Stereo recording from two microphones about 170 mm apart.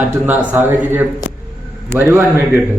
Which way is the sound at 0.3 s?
10° right (ahead or behind).